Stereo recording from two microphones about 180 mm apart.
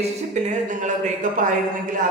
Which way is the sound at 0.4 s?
45° right (ahead or behind).